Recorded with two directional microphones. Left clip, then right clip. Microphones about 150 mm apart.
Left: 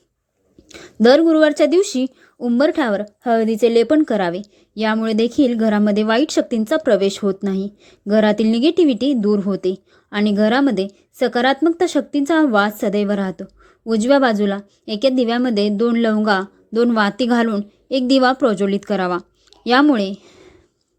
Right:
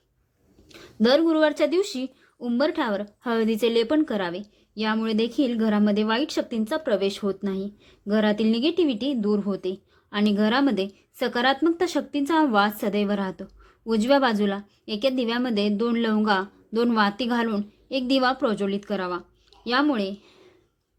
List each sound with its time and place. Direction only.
0.7 s a woman's voice: 45° left (ahead or behind)
3.2 s a woman's voice: 25° left (ahead or behind); by 20.5 s 45° left (ahead or behind)